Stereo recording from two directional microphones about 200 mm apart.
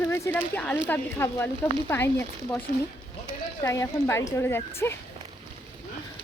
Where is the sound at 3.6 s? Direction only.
15° left (ahead or behind).